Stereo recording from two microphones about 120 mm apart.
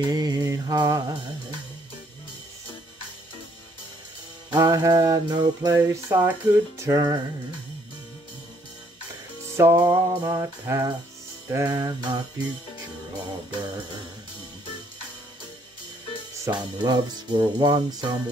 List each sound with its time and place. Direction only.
0.0 s mantra: 35° right (ahead or behind)
4.5 s music: 30° right (ahead or behind)
9.6 s music: 20° right (ahead or behind)
16.5 s music: 35° right (ahead or behind)